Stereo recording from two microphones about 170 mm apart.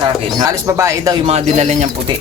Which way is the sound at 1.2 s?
40° right (ahead or behind).